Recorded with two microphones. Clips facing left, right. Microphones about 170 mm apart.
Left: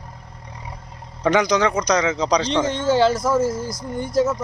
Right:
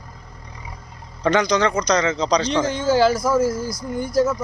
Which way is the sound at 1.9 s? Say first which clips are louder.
Even; 10° left (ahead or behind).